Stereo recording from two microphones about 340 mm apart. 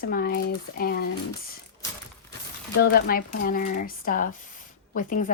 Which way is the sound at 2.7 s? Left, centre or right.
Left.